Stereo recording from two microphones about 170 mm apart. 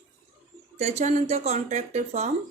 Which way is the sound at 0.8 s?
40° right (ahead or behind).